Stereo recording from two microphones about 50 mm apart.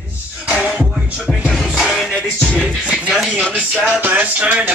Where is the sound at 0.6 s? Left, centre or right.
Centre.